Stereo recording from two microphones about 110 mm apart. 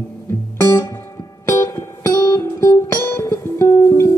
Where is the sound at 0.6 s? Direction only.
20° left (ahead or behind).